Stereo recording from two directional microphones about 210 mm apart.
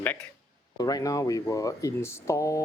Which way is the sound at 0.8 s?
15° left (ahead or behind).